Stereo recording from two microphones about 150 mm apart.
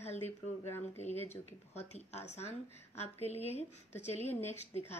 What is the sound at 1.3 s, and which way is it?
A woman's voice, 45° left (ahead or behind).